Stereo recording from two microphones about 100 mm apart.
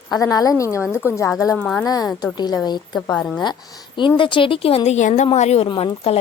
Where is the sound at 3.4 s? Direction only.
50° left (ahead or behind); by 4.8 s 70° left (ahead or behind).